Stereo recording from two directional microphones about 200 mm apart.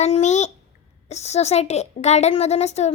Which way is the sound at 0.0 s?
35° left (ahead or behind).